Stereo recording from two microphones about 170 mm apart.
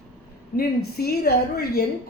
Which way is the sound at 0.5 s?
65° left (ahead or behind).